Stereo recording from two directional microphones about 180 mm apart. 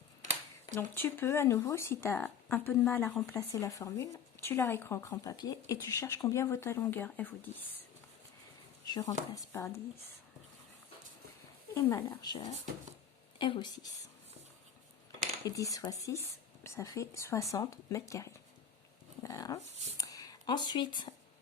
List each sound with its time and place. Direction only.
0.8 s speech: 15° left (ahead or behind)
8.9 s speech: 20° left (ahead or behind)
11.7 s speech: 20° left (ahead or behind)
15.4 s speech: 20° left (ahead or behind)
20.0 s a sound: 20° left (ahead or behind)